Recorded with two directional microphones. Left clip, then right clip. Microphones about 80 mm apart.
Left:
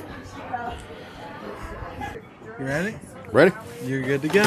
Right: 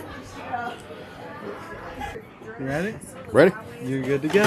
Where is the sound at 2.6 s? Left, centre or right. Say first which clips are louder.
Left 1 dB; left.